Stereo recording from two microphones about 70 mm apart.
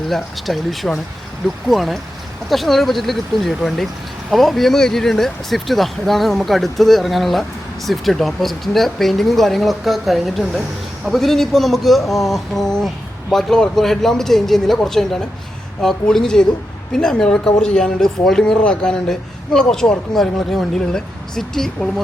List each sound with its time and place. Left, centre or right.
0.1 s speech: centre